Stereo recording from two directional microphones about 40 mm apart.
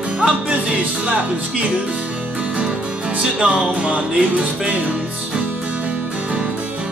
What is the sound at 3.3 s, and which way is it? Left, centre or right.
Music, right.